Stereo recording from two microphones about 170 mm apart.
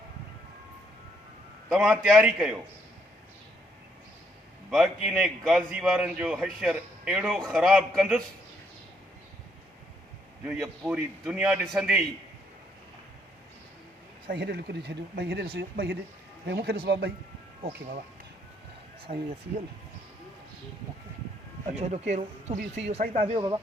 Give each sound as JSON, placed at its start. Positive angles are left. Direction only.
{"t": 1.7, "sound": "a man's voice", "side_deg": 0}
{"t": 4.7, "sound": "a man's voice", "side_deg": -5}
{"t": 10.4, "sound": "a man's voice", "side_deg": -5}
{"t": 14.3, "sound": "speech", "side_deg": -80}
{"t": 19.1, "sound": "speech", "side_deg": -55}
{"t": 21.7, "sound": "speech", "side_deg": -40}
{"t": 22.5, "sound": "speech", "side_deg": -90}
{"t": 22.9, "sound": "speech", "side_deg": -40}